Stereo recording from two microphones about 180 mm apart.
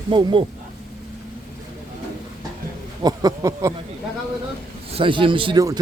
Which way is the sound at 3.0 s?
20° right (ahead or behind).